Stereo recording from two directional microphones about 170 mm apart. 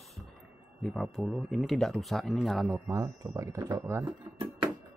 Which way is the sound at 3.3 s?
20° right (ahead or behind).